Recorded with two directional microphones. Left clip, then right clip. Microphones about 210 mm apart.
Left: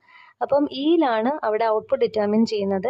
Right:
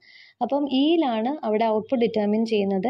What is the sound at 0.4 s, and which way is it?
A woman's voice, 20° left (ahead or behind).